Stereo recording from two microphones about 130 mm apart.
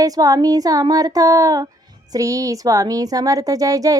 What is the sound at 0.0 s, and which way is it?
Speech, 30° right (ahead or behind).